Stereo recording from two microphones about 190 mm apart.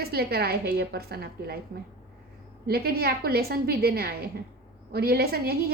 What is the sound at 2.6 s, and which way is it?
A woman's voice, 55° right (ahead or behind).